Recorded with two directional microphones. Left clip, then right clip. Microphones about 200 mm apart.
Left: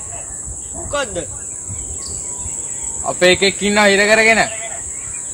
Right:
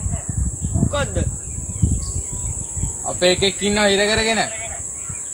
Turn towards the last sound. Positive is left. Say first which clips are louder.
# left 6 dB
turn(degrees=30)  # may be behind; listen again after turning